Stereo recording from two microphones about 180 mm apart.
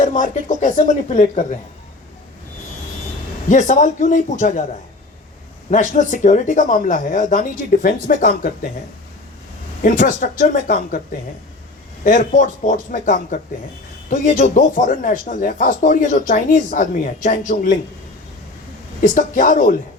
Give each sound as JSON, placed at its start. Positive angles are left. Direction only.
{"t": 0.0, "sound": "speech", "side_deg": 45}
{"t": 3.5, "sound": "speech", "side_deg": 45}
{"t": 5.7, "sound": "speech", "side_deg": 45}
{"t": 9.8, "sound": "speech", "side_deg": 50}
{"t": 12.0, "sound": "speech", "side_deg": 50}
{"t": 19.0, "sound": "speech", "side_deg": 45}